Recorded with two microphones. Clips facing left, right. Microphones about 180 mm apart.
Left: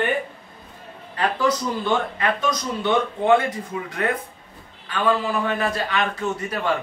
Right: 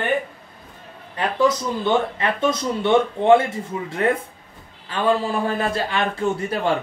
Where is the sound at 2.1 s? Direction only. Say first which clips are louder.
Right 2 dB; 25° right (ahead or behind).